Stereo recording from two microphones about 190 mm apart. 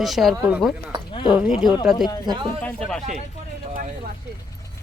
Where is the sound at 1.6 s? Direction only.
Centre (ahead or behind).